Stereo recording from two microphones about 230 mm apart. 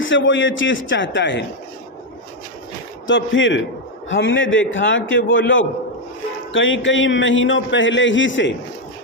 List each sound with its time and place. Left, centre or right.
0.0 s speech: left
3.1 s a man's voice: left